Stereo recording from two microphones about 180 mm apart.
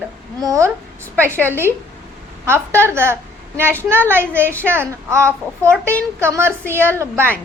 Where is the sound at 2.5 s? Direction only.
15° right (ahead or behind).